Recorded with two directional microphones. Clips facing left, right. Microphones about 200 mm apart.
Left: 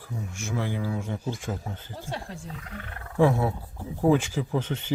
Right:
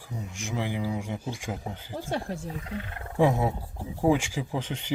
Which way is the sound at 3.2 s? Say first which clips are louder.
Left 1 dB; 15° right (ahead or behind).